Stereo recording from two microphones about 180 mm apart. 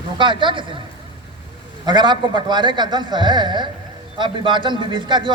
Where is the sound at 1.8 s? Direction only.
25° right (ahead or behind).